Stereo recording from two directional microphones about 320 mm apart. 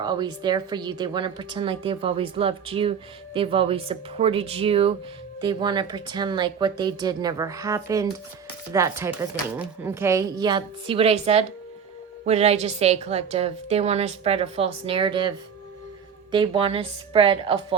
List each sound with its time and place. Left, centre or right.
0.0 s a woman's voice: centre